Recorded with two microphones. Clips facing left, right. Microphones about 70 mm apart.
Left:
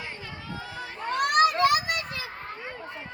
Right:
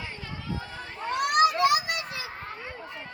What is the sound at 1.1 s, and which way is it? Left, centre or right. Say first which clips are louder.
Children playing: left 1 dB; left.